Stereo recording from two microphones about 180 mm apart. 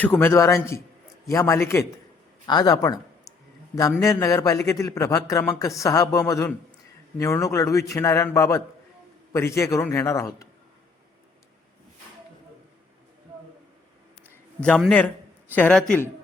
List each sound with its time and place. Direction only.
0.0 s speech: 10° left (ahead or behind)
4.0 s speech: 15° left (ahead or behind)
14.3 s a sound: 5° left (ahead or behind)
14.8 s speech: 5° left (ahead or behind)